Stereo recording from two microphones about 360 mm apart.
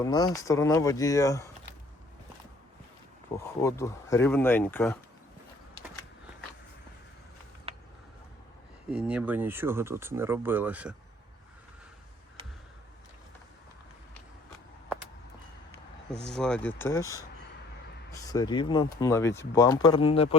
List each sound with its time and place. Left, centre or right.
0.0 s speech: centre
3.3 s speech: centre
7.7 s a sound: centre
8.9 s speech: centre
16.3 s speech: centre